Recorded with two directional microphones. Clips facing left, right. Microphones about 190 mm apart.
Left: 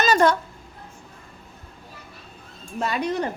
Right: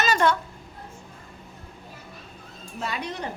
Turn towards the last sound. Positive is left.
turn(degrees=45)  # may be behind; listen again after turning